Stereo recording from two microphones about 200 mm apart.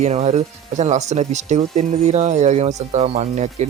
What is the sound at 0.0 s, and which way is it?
Speech, 35° right (ahead or behind).